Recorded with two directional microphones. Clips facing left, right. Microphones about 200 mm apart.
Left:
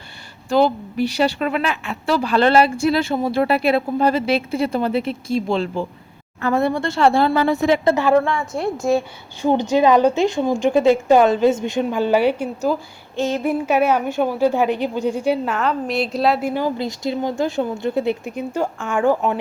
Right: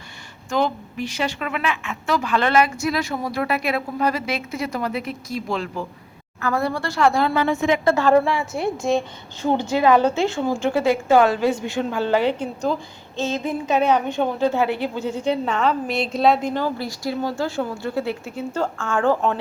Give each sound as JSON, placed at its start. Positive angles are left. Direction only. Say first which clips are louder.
{"t": 0.5, "sound": "a woman's voice", "louder": "left 6 dB", "side_deg": 35}
{"t": 7.9, "sound": "a woman's voice", "louder": "left 1 dB", "side_deg": 15}
{"t": 8.1, "sound": "a woman's voice", "louder": "left 1 dB", "side_deg": -5}
{"t": 9.4, "sound": "a woman's voice", "louder": "left 3 dB", "side_deg": 15}